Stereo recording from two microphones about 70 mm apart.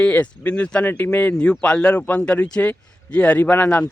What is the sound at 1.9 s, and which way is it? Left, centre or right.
Speech, left.